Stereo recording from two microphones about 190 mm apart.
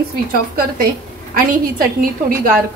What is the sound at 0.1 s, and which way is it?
A woman's voice, 50° right (ahead or behind).